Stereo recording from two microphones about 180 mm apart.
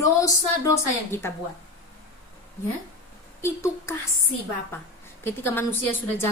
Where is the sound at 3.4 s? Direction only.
15° left (ahead or behind).